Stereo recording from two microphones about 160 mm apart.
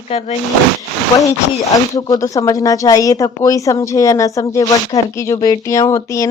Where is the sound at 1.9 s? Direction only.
25° left (ahead or behind).